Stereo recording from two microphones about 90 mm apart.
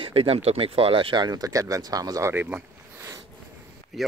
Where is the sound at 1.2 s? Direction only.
45° right (ahead or behind).